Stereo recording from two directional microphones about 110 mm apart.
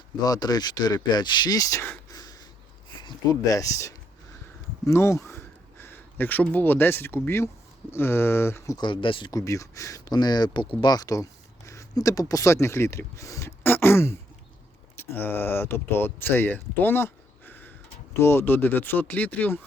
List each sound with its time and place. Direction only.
0.3 s speech: 35° left (ahead or behind)
3.0 s speech: 35° left (ahead or behind)
8.8 s speech: 50° left (ahead or behind)
9.3 s speech: 30° left (ahead or behind)